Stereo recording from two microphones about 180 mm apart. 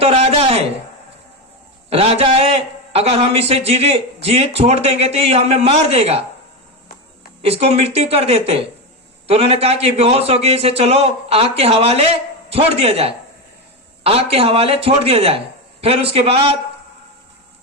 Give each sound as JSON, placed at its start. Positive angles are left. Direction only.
{"t": 0.0, "sound": "a sound", "side_deg": -35}
{"t": 1.9, "sound": "a man's voice", "side_deg": -35}
{"t": 7.4, "sound": "a man's voice", "side_deg": -35}